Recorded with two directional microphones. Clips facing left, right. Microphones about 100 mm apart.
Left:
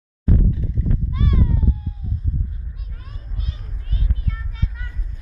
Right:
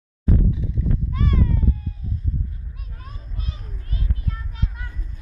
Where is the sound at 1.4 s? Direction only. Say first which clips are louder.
Even; 15° left (ahead or behind).